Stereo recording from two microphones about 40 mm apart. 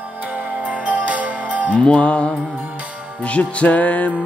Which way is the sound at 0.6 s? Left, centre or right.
Right.